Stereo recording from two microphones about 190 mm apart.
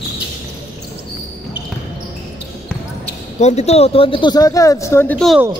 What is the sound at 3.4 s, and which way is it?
Speech, 35° left (ahead or behind).